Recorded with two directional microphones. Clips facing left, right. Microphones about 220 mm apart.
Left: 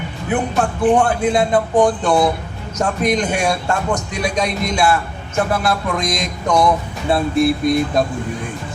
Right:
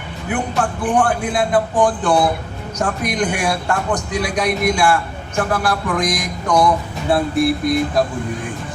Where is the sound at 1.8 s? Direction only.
25° left (ahead or behind).